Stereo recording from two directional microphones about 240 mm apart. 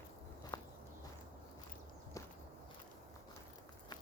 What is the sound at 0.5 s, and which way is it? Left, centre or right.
Walk, centre.